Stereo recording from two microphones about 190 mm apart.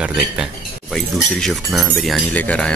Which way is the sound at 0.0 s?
5° right (ahead or behind).